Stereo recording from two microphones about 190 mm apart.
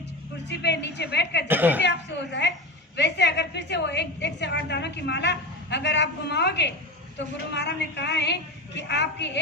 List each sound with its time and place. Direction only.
0.4 s a woman's voice: 65° left (ahead or behind)
1.5 s speech: 10° right (ahead or behind)
1.8 s a woman's voice: 65° left (ahead or behind)